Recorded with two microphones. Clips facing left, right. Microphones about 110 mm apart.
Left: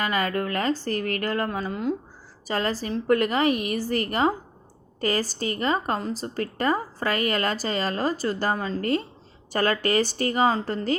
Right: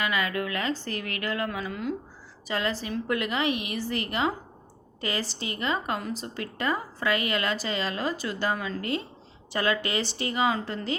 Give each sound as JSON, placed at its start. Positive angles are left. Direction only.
{"t": 0.0, "sound": "a woman's voice", "side_deg": 40}
{"t": 2.5, "sound": "a woman's voice", "side_deg": 40}